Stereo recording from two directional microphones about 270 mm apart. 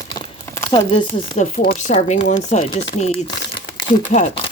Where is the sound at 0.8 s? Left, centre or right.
Left.